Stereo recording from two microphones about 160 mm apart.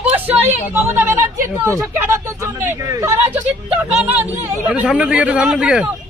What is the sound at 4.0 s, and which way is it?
A man's voice, 10° right (ahead or behind).